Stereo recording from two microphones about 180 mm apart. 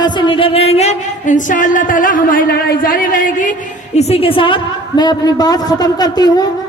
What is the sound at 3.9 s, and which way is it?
A woman's voice, 35° left (ahead or behind).